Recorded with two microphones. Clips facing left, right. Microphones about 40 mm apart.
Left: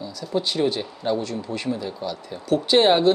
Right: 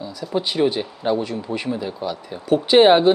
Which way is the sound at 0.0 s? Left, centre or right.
Centre.